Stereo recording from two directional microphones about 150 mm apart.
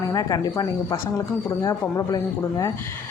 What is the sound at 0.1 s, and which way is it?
A woman's voice, 25° left (ahead or behind).